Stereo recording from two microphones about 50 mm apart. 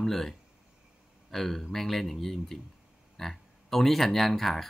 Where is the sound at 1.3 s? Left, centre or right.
Centre.